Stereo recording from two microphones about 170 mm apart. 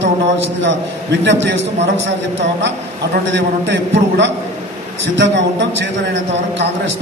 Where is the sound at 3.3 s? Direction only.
90° right.